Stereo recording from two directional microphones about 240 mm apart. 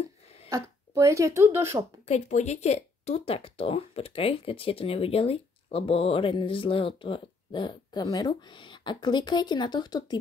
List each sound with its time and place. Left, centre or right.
0.5 s speech: centre
2.0 s speech: left